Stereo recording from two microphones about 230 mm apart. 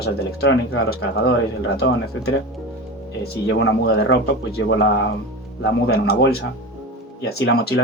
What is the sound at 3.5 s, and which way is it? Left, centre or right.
Speech, left.